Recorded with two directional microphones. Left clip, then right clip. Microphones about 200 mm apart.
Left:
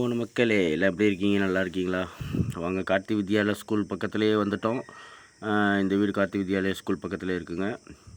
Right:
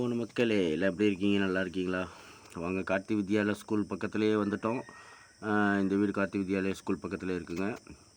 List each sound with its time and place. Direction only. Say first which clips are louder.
0.0 s speech: left 5 dB; 20° left (ahead or behind)